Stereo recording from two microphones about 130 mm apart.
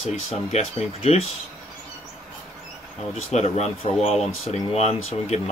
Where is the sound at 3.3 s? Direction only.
55° left (ahead or behind).